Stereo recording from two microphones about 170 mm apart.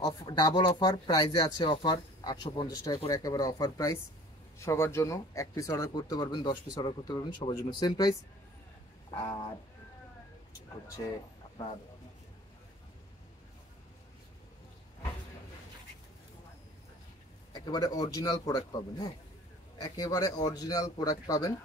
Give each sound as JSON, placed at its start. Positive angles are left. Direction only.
{"t": 0.0, "sound": "speech", "side_deg": 25}
{"t": 17.5, "sound": "speech", "side_deg": 25}